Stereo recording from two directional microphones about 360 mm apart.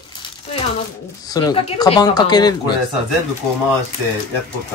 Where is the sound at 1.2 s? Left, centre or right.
Centre.